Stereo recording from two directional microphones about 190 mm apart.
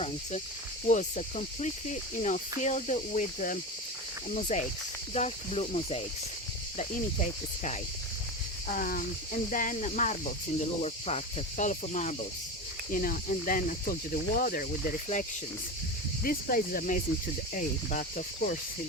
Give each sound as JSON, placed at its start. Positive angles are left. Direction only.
{"t": 0.0, "sound": "speech", "side_deg": 35}
{"t": 8.6, "sound": "speech", "side_deg": 50}